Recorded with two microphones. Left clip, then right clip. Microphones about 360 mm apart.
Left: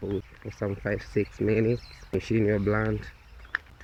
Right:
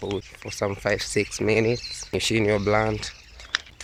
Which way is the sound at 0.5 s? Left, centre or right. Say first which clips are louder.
Right 6 dB; centre.